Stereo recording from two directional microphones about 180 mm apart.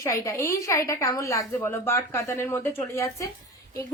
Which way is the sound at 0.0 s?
20° left (ahead or behind).